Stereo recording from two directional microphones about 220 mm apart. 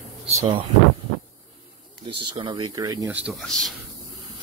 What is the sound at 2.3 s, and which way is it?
Speech, 20° right (ahead or behind).